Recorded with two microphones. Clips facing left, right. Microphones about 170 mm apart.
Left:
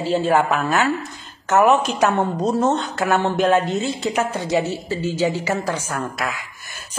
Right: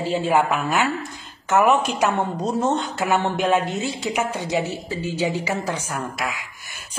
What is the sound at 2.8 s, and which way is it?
A woman's voice, 15° right (ahead or behind).